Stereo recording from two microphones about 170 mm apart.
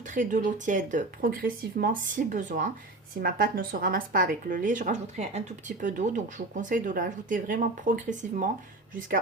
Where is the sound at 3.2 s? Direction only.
60° right (ahead or behind).